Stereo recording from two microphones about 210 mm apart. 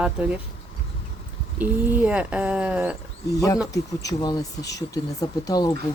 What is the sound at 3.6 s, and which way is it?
Speech, 20° left (ahead or behind).